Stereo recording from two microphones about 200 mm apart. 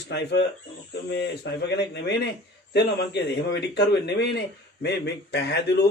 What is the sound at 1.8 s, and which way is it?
Speech, 60° left (ahead or behind).